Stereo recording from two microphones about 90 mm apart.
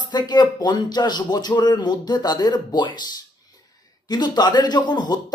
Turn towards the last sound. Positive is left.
turn(degrees=55)  # may be behind; listen again after turning